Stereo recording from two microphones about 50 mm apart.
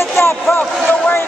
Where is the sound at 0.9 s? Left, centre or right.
Left.